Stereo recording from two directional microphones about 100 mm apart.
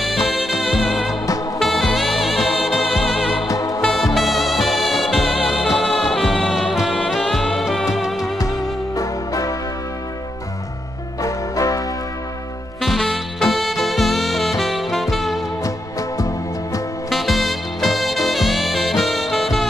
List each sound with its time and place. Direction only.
0.0 s music: centre (ahead or behind)
3.4 s music: 35° left (ahead or behind)
3.8 s music: centre (ahead or behind)
8.9 s music: 35° left (ahead or behind)
11.2 s music: 35° left (ahead or behind)
12.8 s music: centre (ahead or behind)
17.1 s music: centre (ahead or behind)